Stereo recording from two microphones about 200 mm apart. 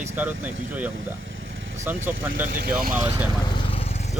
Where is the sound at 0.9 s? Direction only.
75° right (ahead or behind).